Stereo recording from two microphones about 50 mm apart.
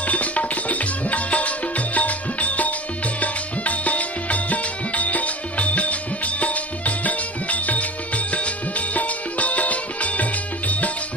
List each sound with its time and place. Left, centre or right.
0.0 s music: left